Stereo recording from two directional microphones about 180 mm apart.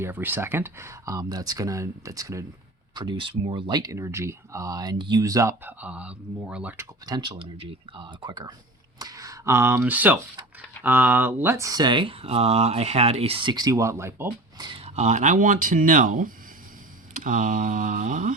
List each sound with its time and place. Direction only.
0.0 s speech: 10° right (ahead or behind)
7.0 s speech: 25° right (ahead or behind)
14.7 s speech: 35° right (ahead or behind)